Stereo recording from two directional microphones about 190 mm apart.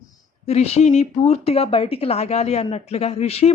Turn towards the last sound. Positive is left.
turn(degrees=35)  # may be behind; listen again after turning